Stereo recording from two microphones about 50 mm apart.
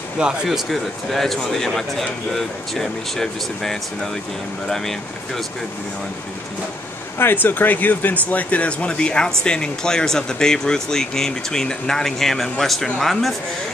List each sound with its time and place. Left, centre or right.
0.5 s speech: centre
1.1 s speech: centre
7.2 s speech: left; by 13.3 s centre